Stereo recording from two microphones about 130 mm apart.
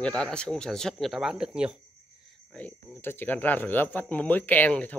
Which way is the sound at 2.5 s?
10° left (ahead or behind).